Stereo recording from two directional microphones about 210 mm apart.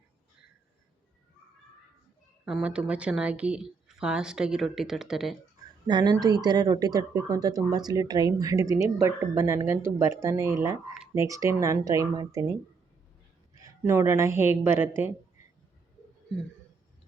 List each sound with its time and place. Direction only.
2.4 s a woman's voice: 5° right (ahead or behind)
5.9 s speech: 20° right (ahead or behind)
13.6 s speech: 15° right (ahead or behind)